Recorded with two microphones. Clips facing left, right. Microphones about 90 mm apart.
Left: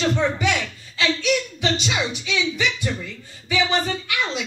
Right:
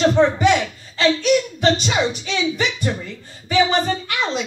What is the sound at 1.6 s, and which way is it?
Speech, 45° right (ahead or behind).